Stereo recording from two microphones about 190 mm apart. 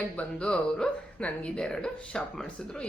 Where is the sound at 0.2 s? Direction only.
5° left (ahead or behind).